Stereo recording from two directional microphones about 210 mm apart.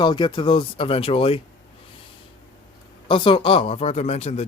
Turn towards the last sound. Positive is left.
turn(degrees=30)  # may be behind; listen again after turning